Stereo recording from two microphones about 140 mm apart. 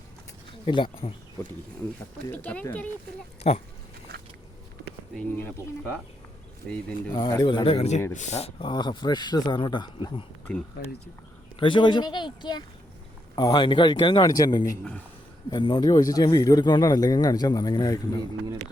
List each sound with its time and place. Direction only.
0.6 s speech: 35° left (ahead or behind)
2.3 s speech: 10° left (ahead or behind)
3.4 s speech: 50° left (ahead or behind)
5.4 s speech: 15° left (ahead or behind)
6.6 s speech: 5° left (ahead or behind)
7.1 s speech: 25° left (ahead or behind)
10.5 s speech: 10° left (ahead or behind)
11.6 s speech: 35° left (ahead or behind)